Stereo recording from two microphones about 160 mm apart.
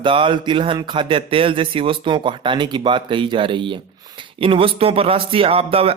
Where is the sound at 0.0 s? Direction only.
30° right (ahead or behind).